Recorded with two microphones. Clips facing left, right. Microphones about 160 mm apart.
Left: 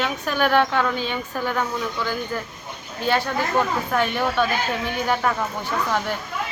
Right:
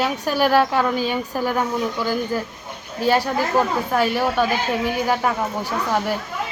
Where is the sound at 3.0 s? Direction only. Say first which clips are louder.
Right 3 dB; 40° right (ahead or behind).